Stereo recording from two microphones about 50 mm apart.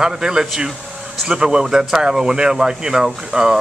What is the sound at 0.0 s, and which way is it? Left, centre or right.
Speech, centre.